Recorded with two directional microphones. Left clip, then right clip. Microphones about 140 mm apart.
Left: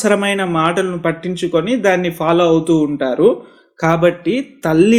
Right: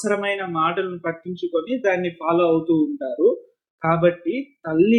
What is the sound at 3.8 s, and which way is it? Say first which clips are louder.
Speech: left 5 dB; 35° left (ahead or behind).